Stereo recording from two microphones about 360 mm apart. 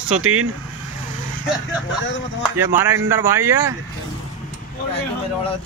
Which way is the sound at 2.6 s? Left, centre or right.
Centre.